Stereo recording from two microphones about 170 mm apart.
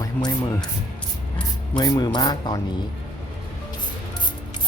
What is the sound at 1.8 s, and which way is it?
Speech, 25° left (ahead or behind).